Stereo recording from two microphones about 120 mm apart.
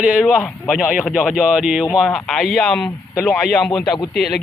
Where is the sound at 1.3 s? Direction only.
5° right (ahead or behind).